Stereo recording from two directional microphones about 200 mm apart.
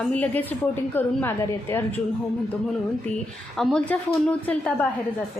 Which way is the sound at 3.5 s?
Centre (ahead or behind).